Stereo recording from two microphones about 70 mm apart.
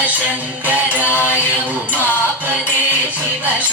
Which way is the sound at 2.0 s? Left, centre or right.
Left.